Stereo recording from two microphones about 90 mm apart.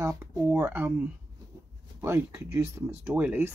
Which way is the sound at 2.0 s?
30° right (ahead or behind).